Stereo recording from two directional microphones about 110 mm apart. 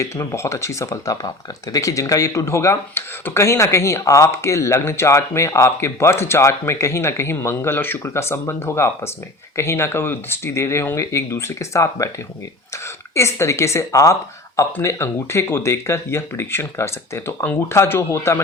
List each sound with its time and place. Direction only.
0.0 s speech: 25° left (ahead or behind)
13.1 s speech: 25° left (ahead or behind)